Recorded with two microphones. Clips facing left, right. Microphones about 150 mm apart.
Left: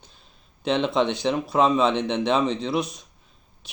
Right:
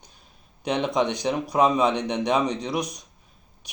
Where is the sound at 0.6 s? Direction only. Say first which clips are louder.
Left 2 dB; 15° right (ahead or behind).